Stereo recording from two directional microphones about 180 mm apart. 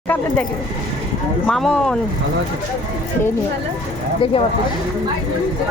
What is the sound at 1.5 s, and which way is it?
Speech, centre (ahead or behind).